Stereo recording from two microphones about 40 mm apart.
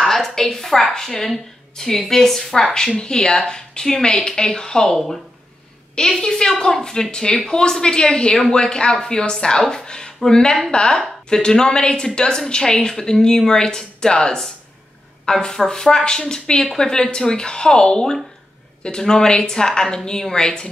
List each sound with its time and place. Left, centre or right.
0.0 s a woman's voice: centre
4.9 s speech: centre
5.9 s a woman's voice: centre